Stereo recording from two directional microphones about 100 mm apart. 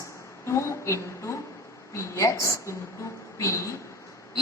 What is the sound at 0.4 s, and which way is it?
A woman's voice, 30° left (ahead or behind).